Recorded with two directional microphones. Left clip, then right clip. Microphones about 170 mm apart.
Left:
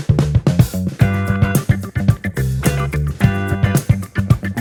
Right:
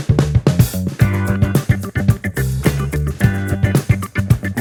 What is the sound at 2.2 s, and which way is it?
Music, 15° right (ahead or behind).